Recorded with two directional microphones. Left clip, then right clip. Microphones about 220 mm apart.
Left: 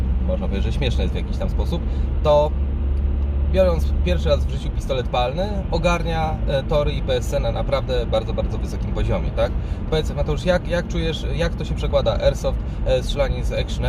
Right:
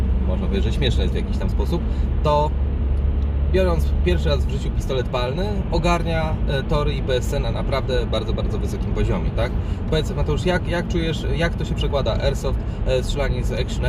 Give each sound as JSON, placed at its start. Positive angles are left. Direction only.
{"t": 0.5, "sound": "speech", "side_deg": 15}
{"t": 3.5, "sound": "speech", "side_deg": 20}